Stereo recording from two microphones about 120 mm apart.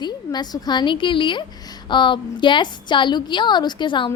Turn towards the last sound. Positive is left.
turn(degrees=40)  # may be behind; listen again after turning